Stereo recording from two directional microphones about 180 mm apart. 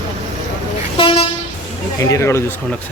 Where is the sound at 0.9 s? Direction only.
30° left (ahead or behind).